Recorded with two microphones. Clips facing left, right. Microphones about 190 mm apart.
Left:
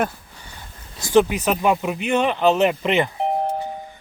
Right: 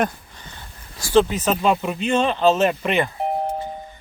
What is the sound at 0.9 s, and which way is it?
Speech, 20° left (ahead or behind).